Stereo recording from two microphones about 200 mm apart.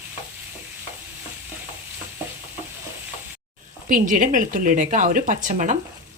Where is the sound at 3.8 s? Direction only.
40° right (ahead or behind).